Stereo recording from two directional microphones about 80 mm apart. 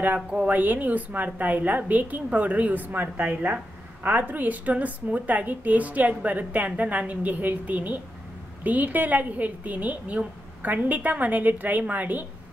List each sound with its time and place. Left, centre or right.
0.0 s a woman's voice: right